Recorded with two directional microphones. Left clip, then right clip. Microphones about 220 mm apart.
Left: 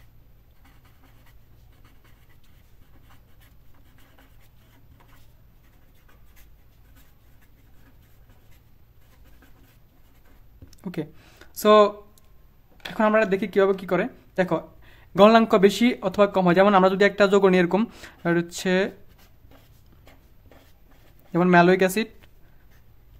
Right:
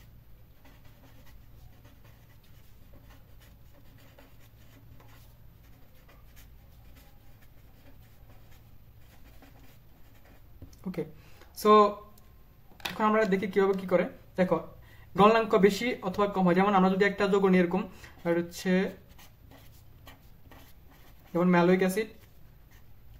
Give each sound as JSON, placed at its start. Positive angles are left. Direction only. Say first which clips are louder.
{"t": 10.8, "sound": "speech", "louder": "left 3 dB", "side_deg": 50}
{"t": 12.9, "sound": "speech", "louder": "left 6 dB", "side_deg": 40}
{"t": 21.3, "sound": "speech", "louder": "left 7 dB", "side_deg": 45}